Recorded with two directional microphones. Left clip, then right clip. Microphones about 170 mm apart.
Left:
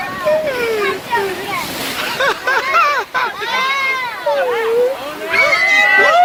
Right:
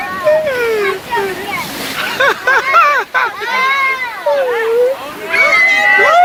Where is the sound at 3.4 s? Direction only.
15° right (ahead or behind).